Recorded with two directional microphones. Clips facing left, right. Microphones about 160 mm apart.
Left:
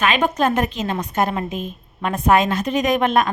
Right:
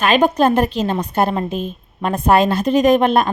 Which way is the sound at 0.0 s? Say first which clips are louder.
Right 4 dB; 35° right (ahead or behind).